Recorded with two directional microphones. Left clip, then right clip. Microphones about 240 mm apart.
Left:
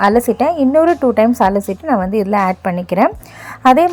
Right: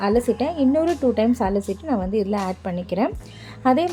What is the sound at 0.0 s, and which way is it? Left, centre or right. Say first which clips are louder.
A woman's voice: left 8 dB; left.